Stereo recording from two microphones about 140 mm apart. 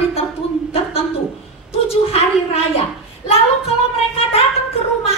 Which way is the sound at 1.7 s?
45° left (ahead or behind).